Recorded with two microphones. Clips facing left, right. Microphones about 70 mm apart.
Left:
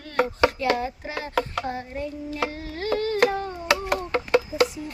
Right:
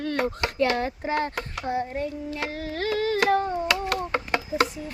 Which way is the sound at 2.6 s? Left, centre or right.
Right.